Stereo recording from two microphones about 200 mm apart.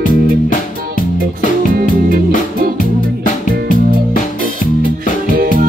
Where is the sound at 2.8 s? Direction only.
45° left (ahead or behind).